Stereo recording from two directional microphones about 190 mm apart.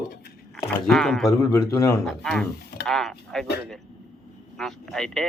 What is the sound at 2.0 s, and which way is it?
Speech, centre (ahead or behind).